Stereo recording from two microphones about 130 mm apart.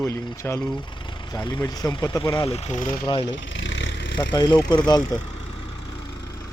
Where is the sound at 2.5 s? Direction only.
55° left (ahead or behind); by 3.0 s 75° left (ahead or behind).